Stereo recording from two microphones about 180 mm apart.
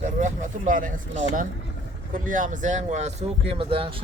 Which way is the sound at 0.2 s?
45° right (ahead or behind).